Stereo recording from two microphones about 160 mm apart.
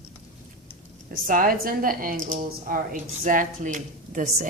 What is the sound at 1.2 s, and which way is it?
A woman's voice, 60° right (ahead or behind).